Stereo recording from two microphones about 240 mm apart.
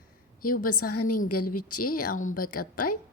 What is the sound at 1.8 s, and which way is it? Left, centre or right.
Speech, left.